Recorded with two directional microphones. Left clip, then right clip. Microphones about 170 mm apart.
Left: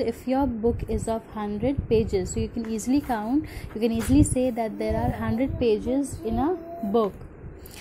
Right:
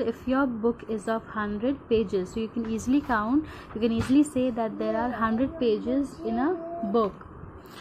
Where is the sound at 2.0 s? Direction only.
50° left (ahead or behind).